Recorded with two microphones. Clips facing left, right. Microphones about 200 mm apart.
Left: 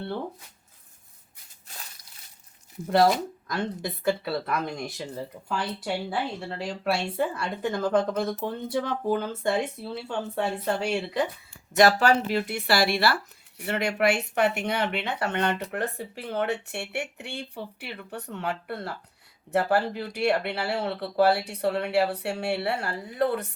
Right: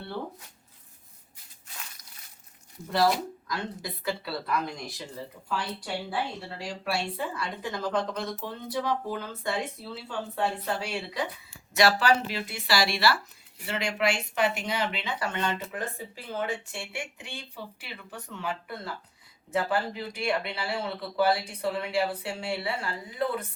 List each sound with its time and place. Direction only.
2.9 s speech: 55° left (ahead or behind)